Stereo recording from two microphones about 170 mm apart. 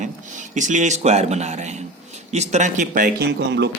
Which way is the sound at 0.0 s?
45° right (ahead or behind).